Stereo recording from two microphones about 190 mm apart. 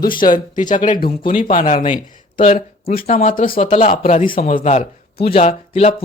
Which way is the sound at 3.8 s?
45° left (ahead or behind).